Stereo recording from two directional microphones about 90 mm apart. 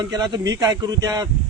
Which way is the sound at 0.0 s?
50° right (ahead or behind).